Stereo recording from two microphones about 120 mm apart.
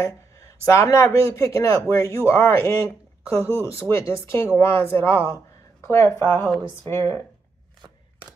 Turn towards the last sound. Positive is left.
turn(degrees=20)  # may be behind; listen again after turning